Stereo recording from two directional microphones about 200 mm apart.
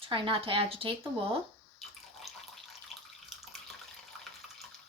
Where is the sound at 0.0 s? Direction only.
25° right (ahead or behind).